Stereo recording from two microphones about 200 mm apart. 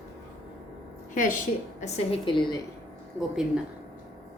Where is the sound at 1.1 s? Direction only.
40° left (ahead or behind); by 2.6 s 25° left (ahead or behind).